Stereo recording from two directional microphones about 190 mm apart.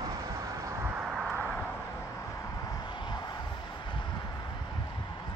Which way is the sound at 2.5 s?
20° left (ahead or behind).